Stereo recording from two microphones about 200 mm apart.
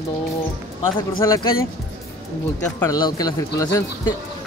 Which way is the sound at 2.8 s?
20° left (ahead or behind).